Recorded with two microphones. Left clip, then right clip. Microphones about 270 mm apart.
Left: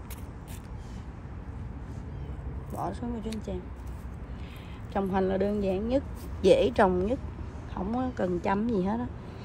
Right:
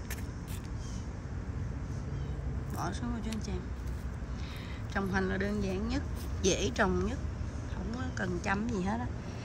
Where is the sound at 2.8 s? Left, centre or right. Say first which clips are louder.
Left 4 dB; centre.